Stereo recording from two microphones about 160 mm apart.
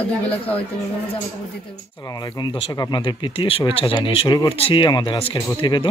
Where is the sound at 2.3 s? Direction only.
30° left (ahead or behind).